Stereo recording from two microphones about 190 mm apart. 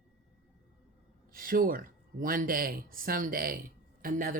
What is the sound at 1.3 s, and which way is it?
Speech, 50° right (ahead or behind).